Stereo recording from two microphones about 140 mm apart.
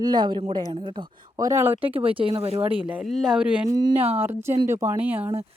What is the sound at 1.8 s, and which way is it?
Speech, 40° right (ahead or behind).